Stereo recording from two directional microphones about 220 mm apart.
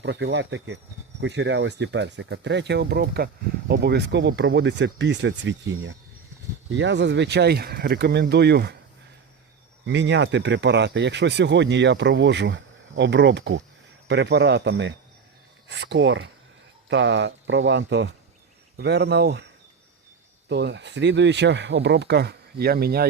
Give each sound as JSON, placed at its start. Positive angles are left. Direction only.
{"t": 0.0, "sound": "speech", "side_deg": -55}
{"t": 9.8, "sound": "speech", "side_deg": -55}
{"t": 20.5, "sound": "speech", "side_deg": -50}